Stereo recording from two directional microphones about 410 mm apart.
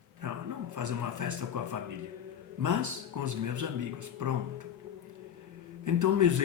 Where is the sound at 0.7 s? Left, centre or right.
Right.